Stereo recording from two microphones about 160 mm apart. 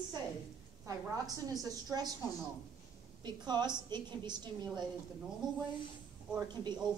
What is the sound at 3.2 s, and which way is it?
A woman's voice, 25° right (ahead or behind).